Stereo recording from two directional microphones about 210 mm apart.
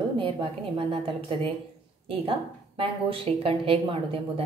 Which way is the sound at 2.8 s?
25° right (ahead or behind).